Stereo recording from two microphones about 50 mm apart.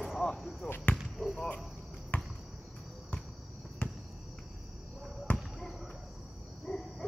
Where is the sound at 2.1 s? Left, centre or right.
Left.